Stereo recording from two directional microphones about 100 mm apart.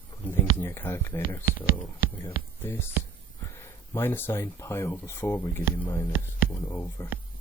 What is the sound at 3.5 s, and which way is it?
Speech, 25° left (ahead or behind).